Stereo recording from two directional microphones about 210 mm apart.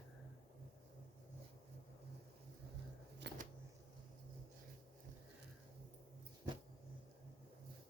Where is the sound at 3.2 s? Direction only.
55° right (ahead or behind).